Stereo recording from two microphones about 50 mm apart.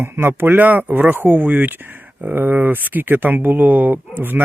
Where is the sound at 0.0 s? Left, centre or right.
Right.